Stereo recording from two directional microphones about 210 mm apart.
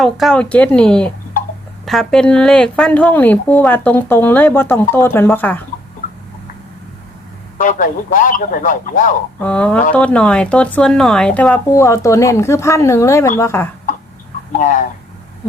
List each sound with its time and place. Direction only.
0.0 s speech: centre (ahead or behind)
7.6 s speech: 40° left (ahead or behind)
9.4 s speech: 5° left (ahead or behind)
14.6 s speech: 40° left (ahead or behind)